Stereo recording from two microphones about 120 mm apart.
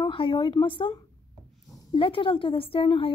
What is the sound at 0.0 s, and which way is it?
Speech, 40° left (ahead or behind).